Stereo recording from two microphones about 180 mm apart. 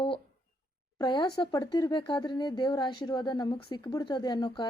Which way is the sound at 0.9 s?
25° left (ahead or behind).